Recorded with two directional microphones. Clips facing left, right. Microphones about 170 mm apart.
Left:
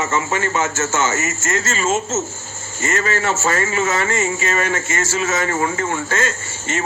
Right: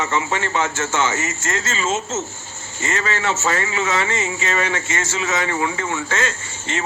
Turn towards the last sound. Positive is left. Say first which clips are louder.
# left 2 dB
turn(degrees=50)  # may be behind; listen again after turning